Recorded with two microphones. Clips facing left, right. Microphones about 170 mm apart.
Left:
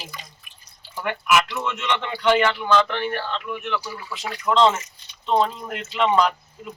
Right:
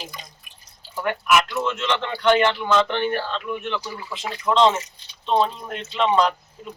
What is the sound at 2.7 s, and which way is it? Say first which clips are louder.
Speech: left 1 dB; 25° right (ahead or behind).